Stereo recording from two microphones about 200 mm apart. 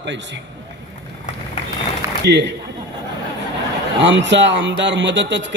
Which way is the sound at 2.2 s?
60° right (ahead or behind).